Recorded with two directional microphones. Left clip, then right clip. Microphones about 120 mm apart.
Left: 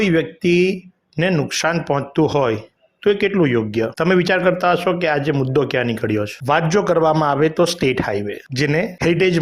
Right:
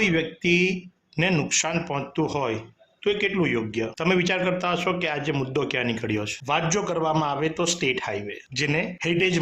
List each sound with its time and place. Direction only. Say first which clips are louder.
0.0 s speech: left 5 dB; 40° left (ahead or behind); by 5.3 s 55° left (ahead or behind)
5.3 s speech: left 8 dB; 35° left (ahead or behind)
6.5 s speech: left 9 dB; 50° left (ahead or behind)